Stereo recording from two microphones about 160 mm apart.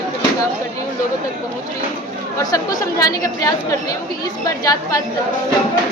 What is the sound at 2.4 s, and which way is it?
A woman's voice, 25° left (ahead or behind).